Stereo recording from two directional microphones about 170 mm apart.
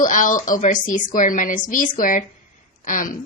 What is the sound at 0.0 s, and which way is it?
A woman's voice, 50° left (ahead or behind).